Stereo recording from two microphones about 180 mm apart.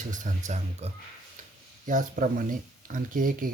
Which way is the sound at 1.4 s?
45° right (ahead or behind).